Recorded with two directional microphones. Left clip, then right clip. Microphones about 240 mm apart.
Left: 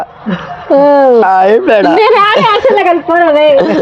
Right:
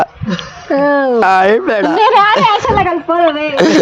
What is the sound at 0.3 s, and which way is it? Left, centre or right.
Speech, centre.